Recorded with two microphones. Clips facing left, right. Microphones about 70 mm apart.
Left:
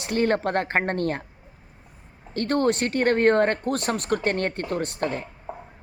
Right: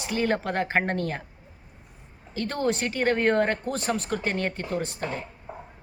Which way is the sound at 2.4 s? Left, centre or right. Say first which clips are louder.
Left 4 dB; left.